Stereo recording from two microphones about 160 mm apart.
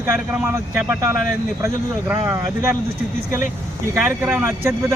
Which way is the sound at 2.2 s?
15° right (ahead or behind).